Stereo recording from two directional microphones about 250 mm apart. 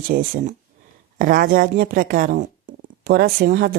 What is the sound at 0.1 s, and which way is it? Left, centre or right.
Speech, right.